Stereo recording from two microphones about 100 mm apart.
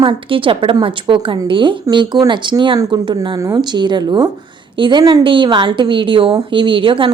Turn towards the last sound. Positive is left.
turn(degrees=-55)  # may be behind; listen again after turning